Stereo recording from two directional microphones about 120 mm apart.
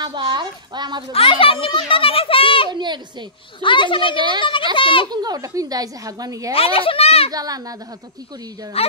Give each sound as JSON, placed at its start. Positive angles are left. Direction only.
{"t": 0.0, "sound": "a woman's voice", "side_deg": -40}
{"t": 1.1, "sound": "a child's voice", "side_deg": 50}
{"t": 2.7, "sound": "a woman's voice", "side_deg": -40}
{"t": 3.6, "sound": "a child's voice", "side_deg": 45}
{"t": 5.1, "sound": "a woman's voice", "side_deg": -35}
{"t": 6.5, "sound": "a child's voice", "side_deg": 50}
{"t": 7.2, "sound": "a woman's voice", "side_deg": -30}
{"t": 8.8, "sound": "speech", "side_deg": 55}